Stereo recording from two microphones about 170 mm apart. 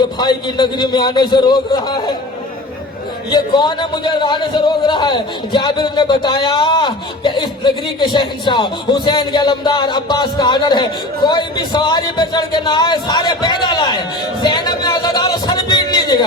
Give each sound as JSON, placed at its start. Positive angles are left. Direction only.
{"t": 0.2, "sound": "a man's voice", "side_deg": 25}
{"t": 3.2, "sound": "a man's voice", "side_deg": 25}
{"t": 14.4, "sound": "a sound", "side_deg": 25}